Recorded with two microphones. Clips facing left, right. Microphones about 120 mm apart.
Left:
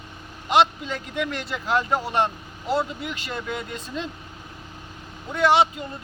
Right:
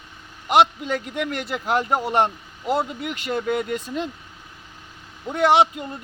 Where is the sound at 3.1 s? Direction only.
55° right (ahead or behind).